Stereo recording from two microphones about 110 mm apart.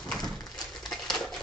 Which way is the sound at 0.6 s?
5° left (ahead or behind).